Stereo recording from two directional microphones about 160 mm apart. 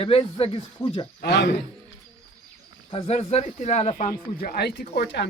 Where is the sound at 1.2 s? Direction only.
90° left.